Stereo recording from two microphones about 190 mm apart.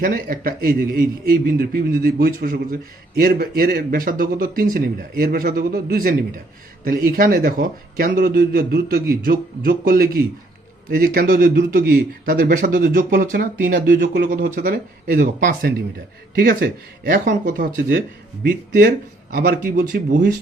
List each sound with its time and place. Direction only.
0.0 s speech: 45° right (ahead or behind)
14.0 s speech: 65° right (ahead or behind)
14.3 s speech: 45° right (ahead or behind)